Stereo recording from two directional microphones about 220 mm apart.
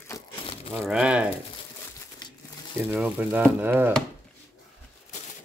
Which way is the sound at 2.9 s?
10° right (ahead or behind).